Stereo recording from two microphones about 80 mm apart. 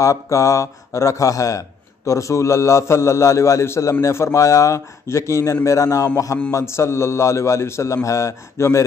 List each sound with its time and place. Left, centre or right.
0.0 s a man's voice: left